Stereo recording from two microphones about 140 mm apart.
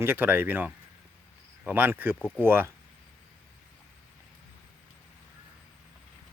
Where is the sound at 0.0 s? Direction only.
15° right (ahead or behind).